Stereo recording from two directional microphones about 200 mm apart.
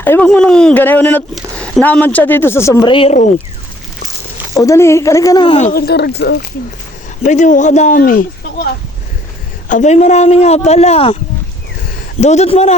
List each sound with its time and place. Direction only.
0.0 s speech: 10° left (ahead or behind); by 3.2 s 30° left (ahead or behind)
4.5 s speech: 15° left (ahead or behind)
5.7 s speech: 50° left (ahead or behind)
7.2 s a man's voice: 40° left (ahead or behind)
12.2 s a man's voice: 35° left (ahead or behind)